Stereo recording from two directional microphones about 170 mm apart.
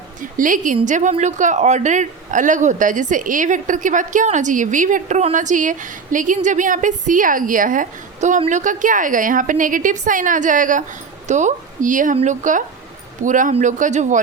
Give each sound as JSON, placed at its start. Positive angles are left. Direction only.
{"t": 0.2, "sound": "speech", "side_deg": -50}